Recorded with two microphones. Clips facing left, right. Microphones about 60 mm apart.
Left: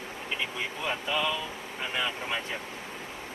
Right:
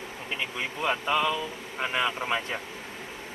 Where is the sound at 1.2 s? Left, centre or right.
Right.